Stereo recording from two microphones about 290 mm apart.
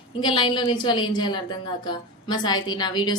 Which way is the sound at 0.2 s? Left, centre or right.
Centre.